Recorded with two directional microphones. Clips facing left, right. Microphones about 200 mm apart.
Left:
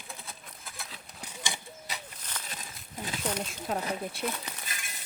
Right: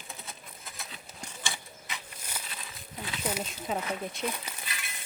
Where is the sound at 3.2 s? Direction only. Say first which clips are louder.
Even; 5° right (ahead or behind).